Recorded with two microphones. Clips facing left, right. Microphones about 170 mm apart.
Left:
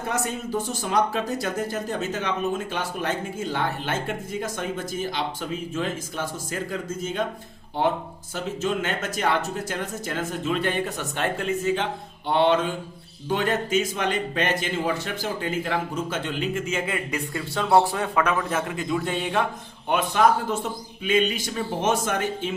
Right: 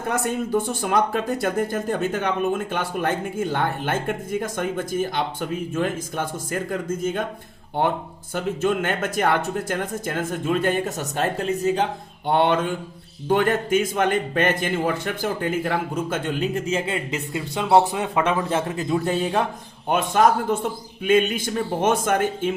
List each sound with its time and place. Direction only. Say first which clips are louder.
0.1 s speech: right 5 dB; 55° right (ahead or behind)
8.6 s speech: right 4 dB; 55° right (ahead or behind)